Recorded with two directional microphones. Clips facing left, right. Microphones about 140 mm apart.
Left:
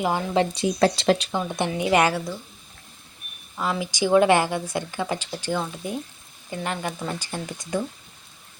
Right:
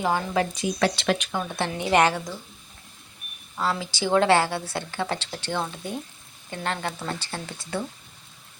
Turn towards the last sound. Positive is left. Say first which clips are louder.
# left 3 dB
turn(degrees=15)  # may be behind; listen again after turning